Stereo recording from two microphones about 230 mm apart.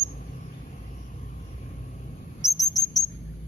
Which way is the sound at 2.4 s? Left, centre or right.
Centre.